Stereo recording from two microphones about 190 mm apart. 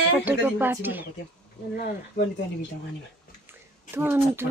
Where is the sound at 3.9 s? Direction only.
10° right (ahead or behind).